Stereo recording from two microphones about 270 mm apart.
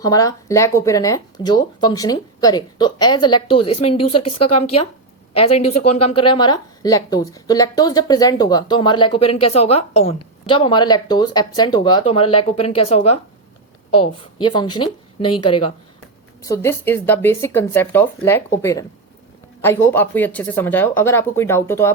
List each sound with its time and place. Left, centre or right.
0.0 s a woman's voice: centre
4.4 s speech: left
5.7 s a woman's voice: left
16.4 s speech: centre